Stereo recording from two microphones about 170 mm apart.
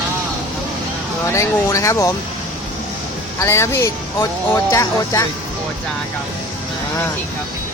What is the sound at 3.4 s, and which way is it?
Speech, 15° left (ahead or behind).